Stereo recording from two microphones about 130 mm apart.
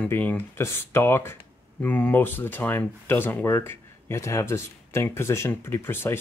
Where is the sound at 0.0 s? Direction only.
10° left (ahead or behind).